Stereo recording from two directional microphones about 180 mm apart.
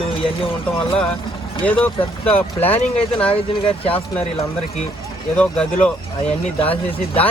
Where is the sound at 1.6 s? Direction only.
10° left (ahead or behind).